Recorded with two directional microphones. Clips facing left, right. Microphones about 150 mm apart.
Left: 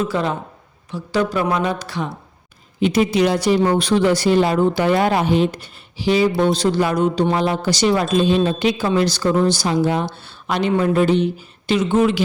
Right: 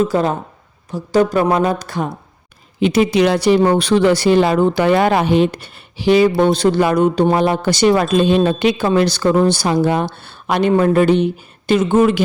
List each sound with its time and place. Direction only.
0.0 s speech: 40° right (ahead or behind)
2.8 s speech: 85° right; by 12.2 s 50° right (ahead or behind)